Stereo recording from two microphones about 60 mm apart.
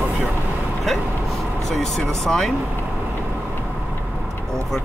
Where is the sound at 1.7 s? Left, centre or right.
Centre.